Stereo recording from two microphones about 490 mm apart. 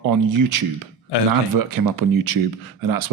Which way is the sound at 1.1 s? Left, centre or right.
Left.